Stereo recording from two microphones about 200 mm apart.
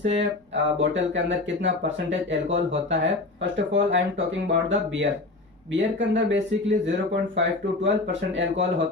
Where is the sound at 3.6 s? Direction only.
65° right (ahead or behind).